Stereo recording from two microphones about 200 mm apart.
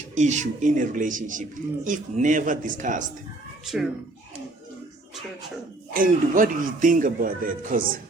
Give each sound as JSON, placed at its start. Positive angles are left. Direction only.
{"t": 0.1, "sound": "speech", "side_deg": -35}
{"t": 5.9, "sound": "a man's voice", "side_deg": -45}